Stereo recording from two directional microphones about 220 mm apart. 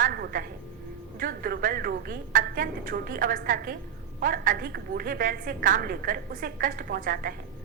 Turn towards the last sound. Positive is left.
turn(degrees=-40)  # may be behind; listen again after turning